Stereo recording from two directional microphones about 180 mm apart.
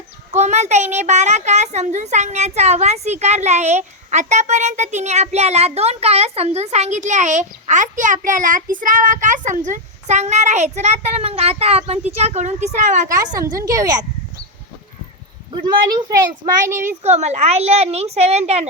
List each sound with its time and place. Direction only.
0.3 s a child's voice: 40° right (ahead or behind)
13.1 s a woman's voice: 20° right (ahead or behind)
16.8 s a child's voice: 40° right (ahead or behind)